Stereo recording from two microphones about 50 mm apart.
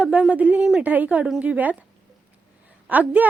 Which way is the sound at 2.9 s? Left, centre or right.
Right.